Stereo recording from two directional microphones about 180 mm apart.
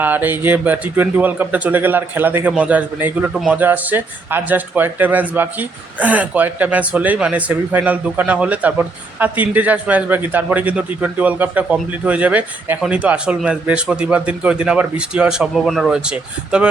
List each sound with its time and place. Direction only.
0.0 s a man's voice: 10° right (ahead or behind)